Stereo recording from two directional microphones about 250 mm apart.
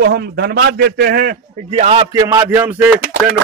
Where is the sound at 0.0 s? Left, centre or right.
Right.